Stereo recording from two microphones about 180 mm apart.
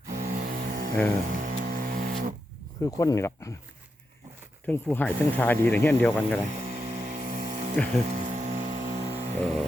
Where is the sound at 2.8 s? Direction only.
20° left (ahead or behind).